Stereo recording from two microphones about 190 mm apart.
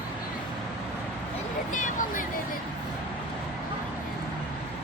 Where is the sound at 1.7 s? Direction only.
45° left (ahead or behind).